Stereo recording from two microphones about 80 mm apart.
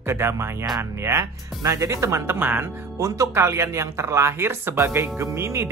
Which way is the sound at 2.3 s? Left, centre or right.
Right.